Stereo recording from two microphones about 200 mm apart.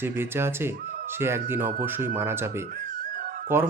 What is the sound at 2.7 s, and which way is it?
Music, 45° right (ahead or behind).